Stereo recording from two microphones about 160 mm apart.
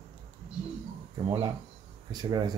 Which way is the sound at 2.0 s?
25° right (ahead or behind).